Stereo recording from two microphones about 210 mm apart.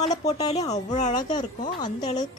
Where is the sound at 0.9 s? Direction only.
35° left (ahead or behind).